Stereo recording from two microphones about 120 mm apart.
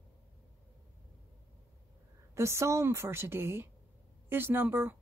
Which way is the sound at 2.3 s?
25° right (ahead or behind).